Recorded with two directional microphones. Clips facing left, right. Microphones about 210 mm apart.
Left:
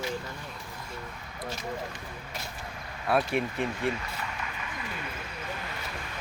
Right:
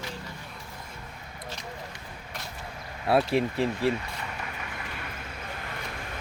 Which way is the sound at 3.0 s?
30° right (ahead or behind).